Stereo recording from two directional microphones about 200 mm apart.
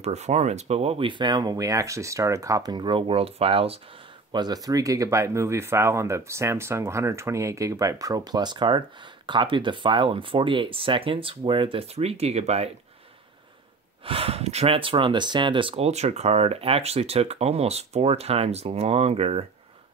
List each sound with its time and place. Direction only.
0.0 s speech: 35° right (ahead or behind)
14.0 s speech: 30° right (ahead or behind)